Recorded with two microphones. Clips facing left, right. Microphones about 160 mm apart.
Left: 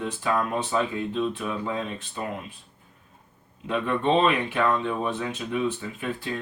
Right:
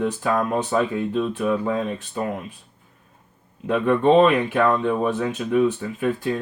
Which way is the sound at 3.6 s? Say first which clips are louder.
Right 7 dB; 50° right (ahead or behind).